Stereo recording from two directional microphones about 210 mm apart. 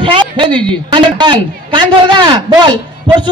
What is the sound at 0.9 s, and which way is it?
A man's voice, 20° right (ahead or behind).